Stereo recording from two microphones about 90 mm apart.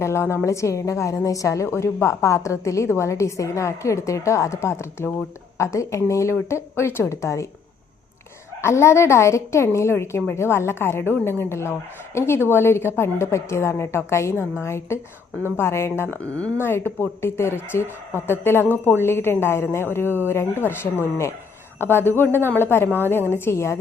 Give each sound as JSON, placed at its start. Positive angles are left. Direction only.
{"t": 0.0, "sound": "a woman's voice", "side_deg": 30}
{"t": 8.6, "sound": "a woman's voice", "side_deg": 30}